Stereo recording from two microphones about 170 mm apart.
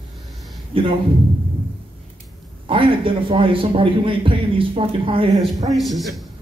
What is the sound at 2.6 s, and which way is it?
A man's voice, 30° right (ahead or behind).